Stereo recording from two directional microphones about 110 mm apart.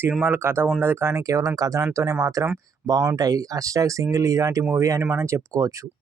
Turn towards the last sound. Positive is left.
turn(degrees=-30)  # may be behind; listen again after turning